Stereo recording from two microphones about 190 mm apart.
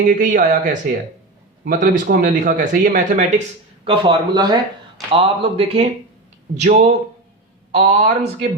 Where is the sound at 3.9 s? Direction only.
25° right (ahead or behind).